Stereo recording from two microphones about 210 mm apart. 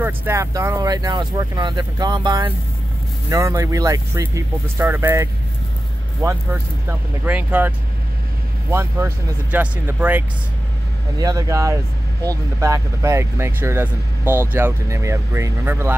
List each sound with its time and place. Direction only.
0.0 s speech: 10° right (ahead or behind)